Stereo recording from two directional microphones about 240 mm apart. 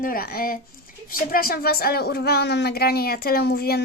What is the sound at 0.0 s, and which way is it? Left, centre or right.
Speech, left.